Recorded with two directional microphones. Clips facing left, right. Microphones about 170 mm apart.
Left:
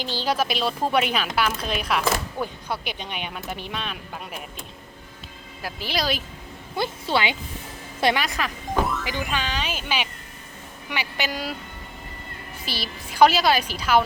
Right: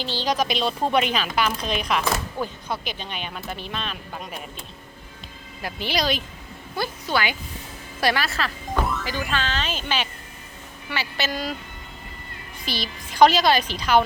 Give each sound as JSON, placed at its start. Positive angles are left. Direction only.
{"t": 0.0, "sound": "speech", "side_deg": 10}
{"t": 5.6, "sound": "speech", "side_deg": 0}
{"t": 6.7, "sound": "speech", "side_deg": 25}
{"t": 8.8, "sound": "music", "side_deg": 0}
{"t": 9.0, "sound": "speech", "side_deg": 15}
{"t": 12.6, "sound": "speech", "side_deg": 5}